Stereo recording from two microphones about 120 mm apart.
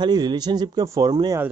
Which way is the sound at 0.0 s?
40° right (ahead or behind).